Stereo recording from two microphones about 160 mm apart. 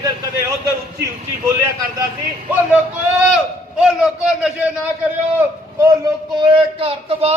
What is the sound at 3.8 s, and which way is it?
Speech, 5° right (ahead or behind).